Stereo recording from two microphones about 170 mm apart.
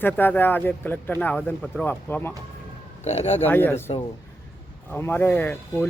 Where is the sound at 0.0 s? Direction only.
10° left (ahead or behind).